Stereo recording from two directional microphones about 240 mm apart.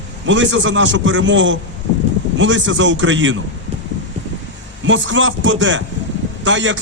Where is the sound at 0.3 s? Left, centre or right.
Right.